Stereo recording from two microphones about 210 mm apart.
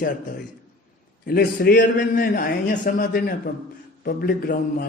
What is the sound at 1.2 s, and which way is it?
Speech, 45° left (ahead or behind).